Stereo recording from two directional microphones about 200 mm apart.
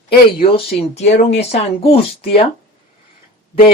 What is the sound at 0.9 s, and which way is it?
Speech, 35° left (ahead or behind).